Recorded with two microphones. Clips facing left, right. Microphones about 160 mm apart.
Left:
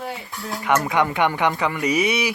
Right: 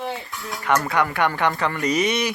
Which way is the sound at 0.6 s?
15° left (ahead or behind).